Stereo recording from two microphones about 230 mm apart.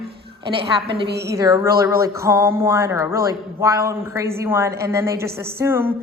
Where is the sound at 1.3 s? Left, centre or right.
Centre.